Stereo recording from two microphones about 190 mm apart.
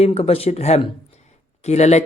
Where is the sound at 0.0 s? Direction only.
30° left (ahead or behind).